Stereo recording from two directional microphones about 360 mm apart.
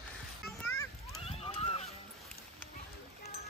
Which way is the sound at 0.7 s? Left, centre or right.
Centre.